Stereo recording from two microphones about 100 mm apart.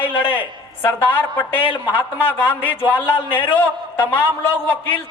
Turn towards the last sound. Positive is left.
turn(degrees=20)  # may be behind; listen again after turning